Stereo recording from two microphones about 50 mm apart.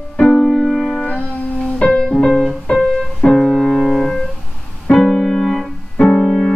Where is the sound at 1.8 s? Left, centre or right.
Left.